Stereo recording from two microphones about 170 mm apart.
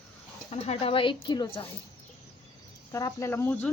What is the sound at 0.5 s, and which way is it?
Speech, 40° left (ahead or behind).